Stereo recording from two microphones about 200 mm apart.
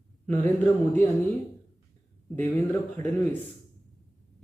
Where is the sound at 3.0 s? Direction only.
35° right (ahead or behind).